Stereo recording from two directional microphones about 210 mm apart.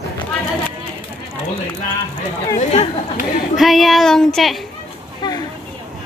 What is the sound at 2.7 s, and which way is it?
Speech, 30° left (ahead or behind).